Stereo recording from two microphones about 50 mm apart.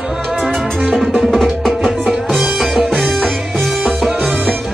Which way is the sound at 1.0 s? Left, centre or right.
Centre.